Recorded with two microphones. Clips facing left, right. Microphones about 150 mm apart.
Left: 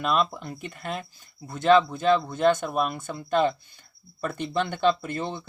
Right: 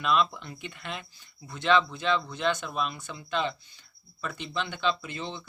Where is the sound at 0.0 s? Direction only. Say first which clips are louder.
Left 1 dB; 45° left (ahead or behind).